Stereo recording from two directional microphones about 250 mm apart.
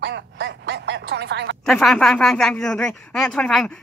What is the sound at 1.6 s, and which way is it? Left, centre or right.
A woman's voice, centre.